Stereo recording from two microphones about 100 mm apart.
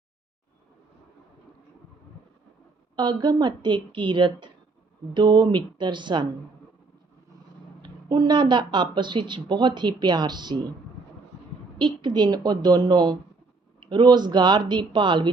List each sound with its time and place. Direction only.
2.9 s speech: 50° right (ahead or behind)
7.8 s speech: 45° right (ahead or behind)
11.8 s speech: 50° right (ahead or behind)